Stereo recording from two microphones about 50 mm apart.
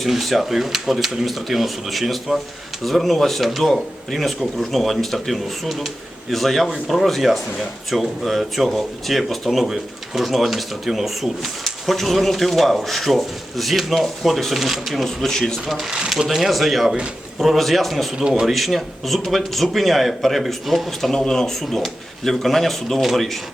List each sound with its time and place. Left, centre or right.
0.0 s speech: centre
15.6 s speech: centre
18.2 s speech: centre
18.5 s speech: centre